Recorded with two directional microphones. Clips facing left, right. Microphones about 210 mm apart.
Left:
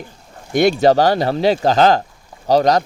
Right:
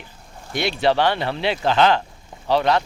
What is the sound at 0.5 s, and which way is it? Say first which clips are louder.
Speech: left 7 dB; 45° left (ahead or behind).